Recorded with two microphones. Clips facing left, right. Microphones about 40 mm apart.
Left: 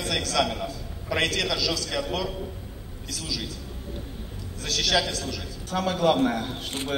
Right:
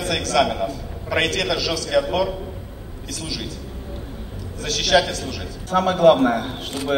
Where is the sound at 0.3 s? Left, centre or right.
Right.